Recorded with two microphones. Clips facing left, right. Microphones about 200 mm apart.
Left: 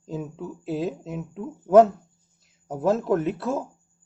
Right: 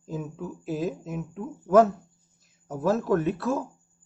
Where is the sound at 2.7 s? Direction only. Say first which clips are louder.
Left 2 dB; 25° left (ahead or behind).